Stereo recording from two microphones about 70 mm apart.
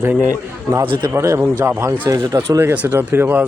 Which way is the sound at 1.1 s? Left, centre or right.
Right.